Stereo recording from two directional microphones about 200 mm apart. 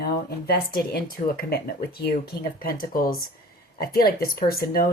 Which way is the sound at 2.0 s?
50° left (ahead or behind).